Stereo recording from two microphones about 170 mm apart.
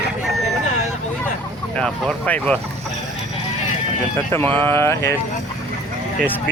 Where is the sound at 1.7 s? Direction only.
5° left (ahead or behind).